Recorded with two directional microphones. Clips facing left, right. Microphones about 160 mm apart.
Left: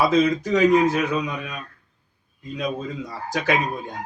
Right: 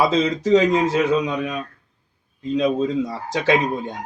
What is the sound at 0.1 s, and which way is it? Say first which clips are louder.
Speech: right 2 dB; 25° right (ahead or behind).